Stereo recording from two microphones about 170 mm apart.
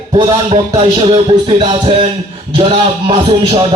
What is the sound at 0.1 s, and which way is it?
Speech, 30° right (ahead or behind).